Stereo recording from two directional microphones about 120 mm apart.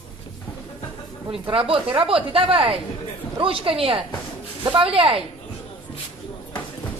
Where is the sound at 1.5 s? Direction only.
45° right (ahead or behind).